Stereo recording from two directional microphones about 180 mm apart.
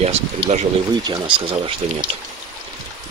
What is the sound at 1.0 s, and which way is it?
Speech, 25° right (ahead or behind).